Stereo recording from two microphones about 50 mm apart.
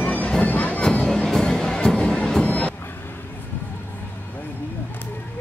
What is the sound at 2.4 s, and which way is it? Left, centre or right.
Music, left.